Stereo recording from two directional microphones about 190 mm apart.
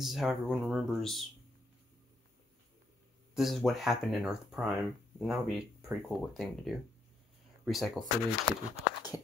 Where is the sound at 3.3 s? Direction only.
Centre (ahead or behind).